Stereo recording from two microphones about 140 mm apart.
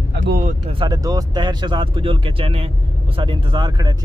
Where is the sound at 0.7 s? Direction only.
35° right (ahead or behind).